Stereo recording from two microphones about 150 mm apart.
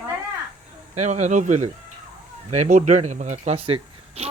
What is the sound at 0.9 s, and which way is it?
Speech, 50° right (ahead or behind).